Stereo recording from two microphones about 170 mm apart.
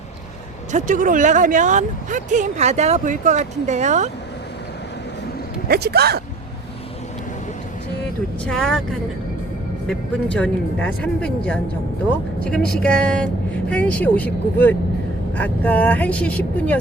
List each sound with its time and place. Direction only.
0.7 s speech: 50° right (ahead or behind)
5.6 s speech: 70° right (ahead or behind)
8.4 s speech: 5° left (ahead or behind)
9.8 s speech: 5° left (ahead or behind)
12.4 s speech: 5° left (ahead or behind)